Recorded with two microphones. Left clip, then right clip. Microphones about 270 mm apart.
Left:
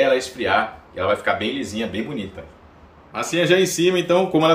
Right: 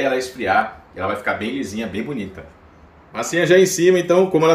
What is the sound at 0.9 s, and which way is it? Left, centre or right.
Speech, centre.